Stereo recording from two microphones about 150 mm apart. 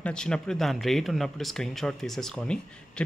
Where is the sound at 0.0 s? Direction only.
5° left (ahead or behind).